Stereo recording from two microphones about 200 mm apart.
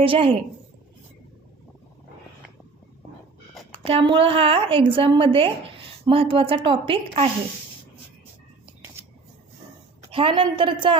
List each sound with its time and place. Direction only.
0.0 s speech: 25° right (ahead or behind)
3.8 s speech: 25° right (ahead or behind)
10.1 s speech: 25° right (ahead or behind)